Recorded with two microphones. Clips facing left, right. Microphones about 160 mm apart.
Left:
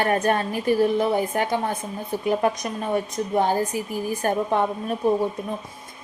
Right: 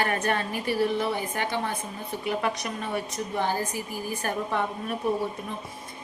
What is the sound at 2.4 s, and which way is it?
Speech, 35° left (ahead or behind).